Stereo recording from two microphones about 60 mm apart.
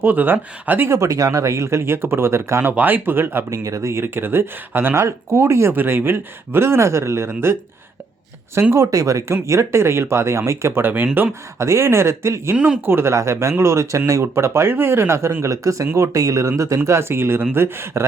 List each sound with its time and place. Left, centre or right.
0.0 s speech: right
0.9 s speech: right
2.7 s speech: right
3.5 s speech: right
4.0 s speech: right
5.0 s speech: right
5.7 s speech: right
8.7 s speech: right
11.6 s speech: right
12.5 s speech: centre
12.8 s speech: right